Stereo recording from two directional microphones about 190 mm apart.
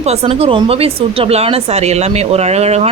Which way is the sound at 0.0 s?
35° right (ahead or behind).